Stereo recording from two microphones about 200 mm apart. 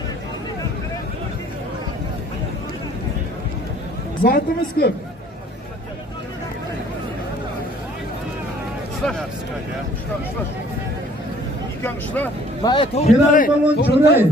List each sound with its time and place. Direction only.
4.2 s speech: 50° left (ahead or behind)
11.8 s vehicle: 10° left (ahead or behind)
12.6 s a man's voice: 30° left (ahead or behind); by 14.2 s 55° left (ahead or behind)